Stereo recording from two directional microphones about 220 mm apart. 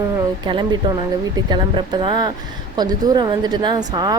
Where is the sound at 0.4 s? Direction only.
20° right (ahead or behind).